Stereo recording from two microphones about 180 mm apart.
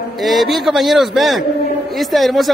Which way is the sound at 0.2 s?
Centre (ahead or behind).